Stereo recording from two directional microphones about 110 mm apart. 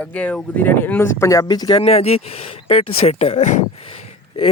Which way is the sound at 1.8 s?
65° left (ahead or behind).